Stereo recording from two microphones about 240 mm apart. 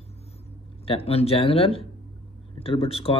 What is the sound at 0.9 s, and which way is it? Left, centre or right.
Speech, left.